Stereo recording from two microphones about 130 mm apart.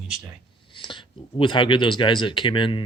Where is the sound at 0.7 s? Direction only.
40° left (ahead or behind).